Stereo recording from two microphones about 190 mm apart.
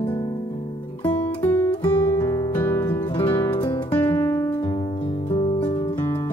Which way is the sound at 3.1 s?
25° left (ahead or behind).